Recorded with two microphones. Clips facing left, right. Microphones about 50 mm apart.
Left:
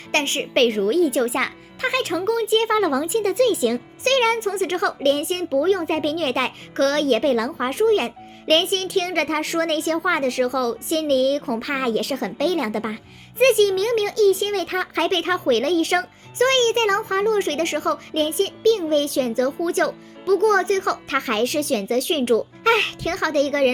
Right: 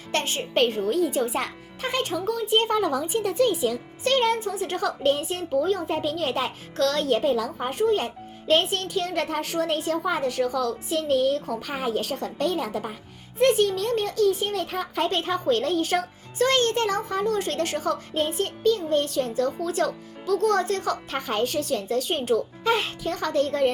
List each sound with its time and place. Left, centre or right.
0.1 s music: left
0.5 s a child's voice: left
6.7 s a child's voice: left
13.4 s a child's voice: left